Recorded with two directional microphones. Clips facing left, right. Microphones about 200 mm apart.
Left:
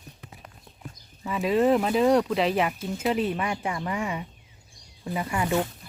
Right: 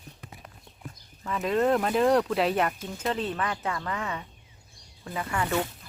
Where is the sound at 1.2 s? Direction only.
10° left (ahead or behind).